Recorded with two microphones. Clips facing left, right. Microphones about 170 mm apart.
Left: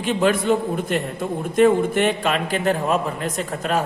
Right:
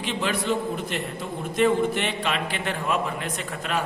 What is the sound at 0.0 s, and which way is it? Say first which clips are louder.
A man's voice: left 8 dB; 50° left (ahead or behind).